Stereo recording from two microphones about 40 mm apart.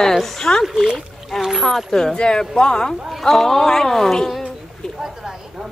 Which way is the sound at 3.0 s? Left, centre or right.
Centre.